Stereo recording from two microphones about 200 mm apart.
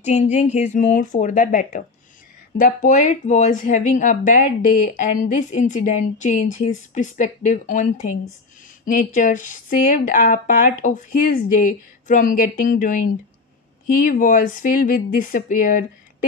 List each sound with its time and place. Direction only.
0.0 s speech: 35° left (ahead or behind)